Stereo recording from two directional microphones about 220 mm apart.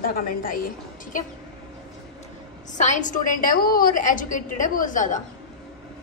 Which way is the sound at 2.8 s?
35° left (ahead or behind).